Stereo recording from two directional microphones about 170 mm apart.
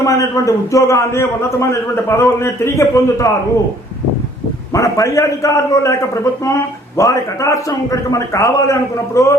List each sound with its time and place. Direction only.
0.0 s a man's voice: 20° left (ahead or behind)
4.7 s a man's voice: 20° left (ahead or behind)